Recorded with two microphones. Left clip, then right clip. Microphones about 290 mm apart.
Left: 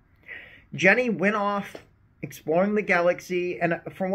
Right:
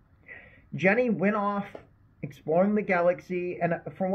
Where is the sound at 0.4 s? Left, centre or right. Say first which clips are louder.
Left 6 dB; left.